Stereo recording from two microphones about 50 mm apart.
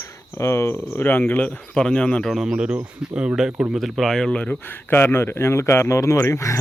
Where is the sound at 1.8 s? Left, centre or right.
Centre.